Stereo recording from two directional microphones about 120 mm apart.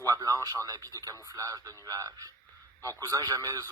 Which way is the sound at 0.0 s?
30° right (ahead or behind).